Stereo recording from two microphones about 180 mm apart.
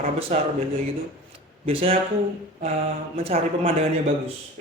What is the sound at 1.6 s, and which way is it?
Speech, 30° right (ahead or behind).